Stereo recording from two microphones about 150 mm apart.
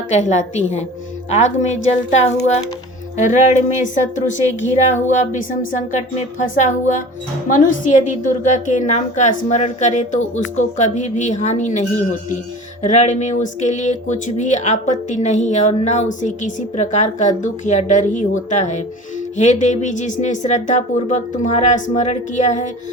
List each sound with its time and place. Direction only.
0.2 s a woman's voice: 50° left (ahead or behind)
8.4 s speech: 55° left (ahead or behind)